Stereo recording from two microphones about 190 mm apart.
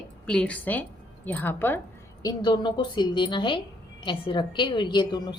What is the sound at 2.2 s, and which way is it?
A woman's voice, 25° left (ahead or behind).